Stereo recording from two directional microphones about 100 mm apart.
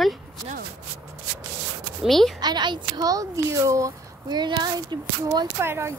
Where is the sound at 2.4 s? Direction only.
45° right (ahead or behind).